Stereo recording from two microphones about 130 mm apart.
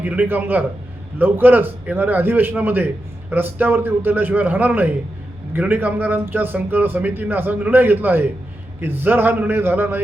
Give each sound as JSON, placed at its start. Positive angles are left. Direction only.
{"t": 0.0, "sound": "a man's voice", "side_deg": -10}